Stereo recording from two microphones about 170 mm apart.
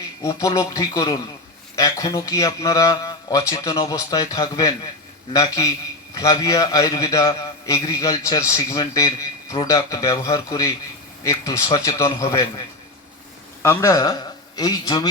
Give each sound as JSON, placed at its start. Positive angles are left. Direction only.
{"t": 0.2, "sound": "a man's voice", "side_deg": 20}